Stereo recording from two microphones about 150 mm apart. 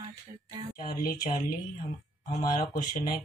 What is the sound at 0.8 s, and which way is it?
Speech, 70° left (ahead or behind).